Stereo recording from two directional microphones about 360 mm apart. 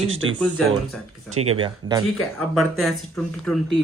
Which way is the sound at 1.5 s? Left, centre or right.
Centre.